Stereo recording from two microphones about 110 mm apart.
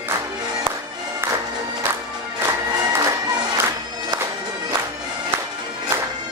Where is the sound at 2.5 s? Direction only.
30° right (ahead or behind).